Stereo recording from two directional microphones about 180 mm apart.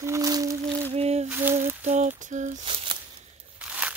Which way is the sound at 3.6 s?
5° right (ahead or behind).